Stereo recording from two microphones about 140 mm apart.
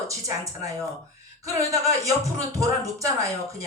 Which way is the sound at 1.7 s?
25° right (ahead or behind).